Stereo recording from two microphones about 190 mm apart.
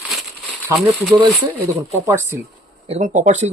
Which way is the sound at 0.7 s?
10° right (ahead or behind).